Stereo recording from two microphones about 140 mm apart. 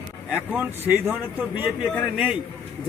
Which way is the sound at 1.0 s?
15° right (ahead or behind).